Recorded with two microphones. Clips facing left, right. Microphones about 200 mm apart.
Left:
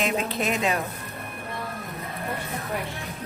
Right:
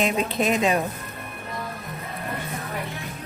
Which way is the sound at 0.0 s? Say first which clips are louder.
Right 3 dB; 15° right (ahead or behind).